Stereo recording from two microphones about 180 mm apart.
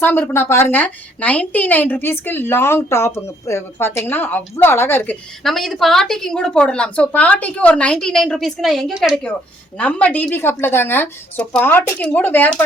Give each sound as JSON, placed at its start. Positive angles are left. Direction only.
{"t": 0.0, "sound": "a woman's voice", "side_deg": 10}
{"t": 5.4, "sound": "a woman's voice", "side_deg": 0}